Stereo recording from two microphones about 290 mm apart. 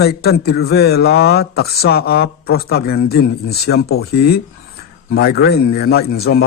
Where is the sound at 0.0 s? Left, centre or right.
Left.